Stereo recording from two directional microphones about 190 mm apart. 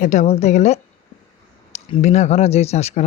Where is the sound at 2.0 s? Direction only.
35° left (ahead or behind).